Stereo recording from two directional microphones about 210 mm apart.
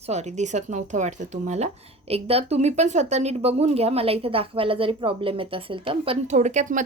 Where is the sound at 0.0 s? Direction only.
30° right (ahead or behind).